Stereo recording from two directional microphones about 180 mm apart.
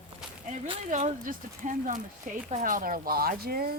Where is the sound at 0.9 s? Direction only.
45° right (ahead or behind).